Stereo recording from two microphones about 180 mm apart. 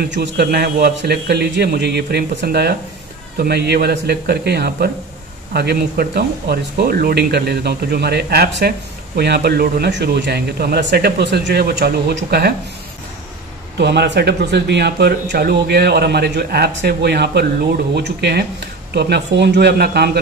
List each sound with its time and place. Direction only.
0.0 s speech: 65° right (ahead or behind)
13.7 s speech: 65° right (ahead or behind)